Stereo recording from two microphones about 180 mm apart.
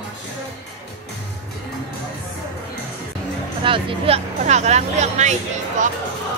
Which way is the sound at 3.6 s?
30° right (ahead or behind).